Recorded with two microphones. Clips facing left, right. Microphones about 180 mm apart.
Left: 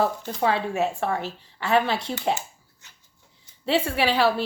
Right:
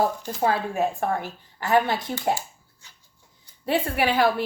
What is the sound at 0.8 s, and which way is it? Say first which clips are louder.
Speech: even; 75° left (ahead or behind).